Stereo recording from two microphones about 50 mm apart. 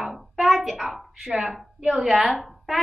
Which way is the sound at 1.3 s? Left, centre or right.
Right.